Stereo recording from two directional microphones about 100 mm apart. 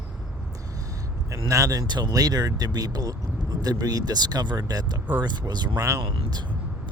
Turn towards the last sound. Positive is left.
turn(degrees=-35)  # may be behind; listen again after turning